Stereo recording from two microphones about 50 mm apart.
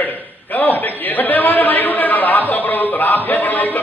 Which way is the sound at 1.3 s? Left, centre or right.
Left.